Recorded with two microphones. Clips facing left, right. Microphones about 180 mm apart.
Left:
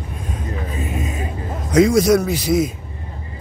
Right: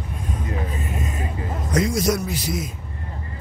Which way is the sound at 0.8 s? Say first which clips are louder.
Left 4 dB; 90° left.